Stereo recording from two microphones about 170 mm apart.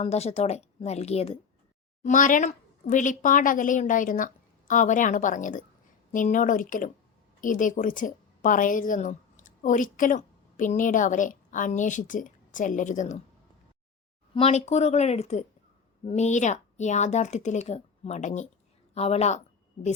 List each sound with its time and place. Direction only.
0.0 s a woman's voice: 40° left (ahead or behind)
2.0 s a woman's voice: 50° left (ahead or behind)
14.3 s a woman's voice: 40° left (ahead or behind)